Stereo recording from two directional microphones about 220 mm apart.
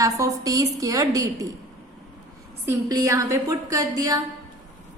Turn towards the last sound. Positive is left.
turn(degrees=-15)  # may be behind; listen again after turning